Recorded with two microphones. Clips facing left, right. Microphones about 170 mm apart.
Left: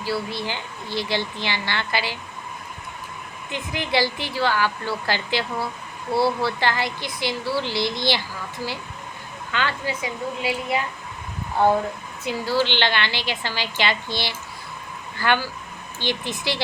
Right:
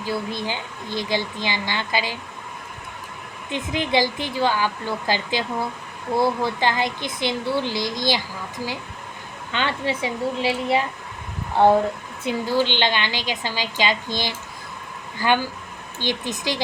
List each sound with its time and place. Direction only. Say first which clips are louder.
0.0 s speech: even; 15° right (ahead or behind)
3.5 s speech: right 3 dB; 20° right (ahead or behind)
9.5 s a woman's voice: right 2 dB; 25° right (ahead or behind)
15.2 s speech: right 2 dB; 15° right (ahead or behind)